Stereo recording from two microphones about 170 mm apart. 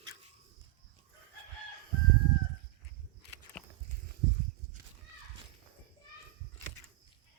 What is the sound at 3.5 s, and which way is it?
Walk, 5° left (ahead or behind).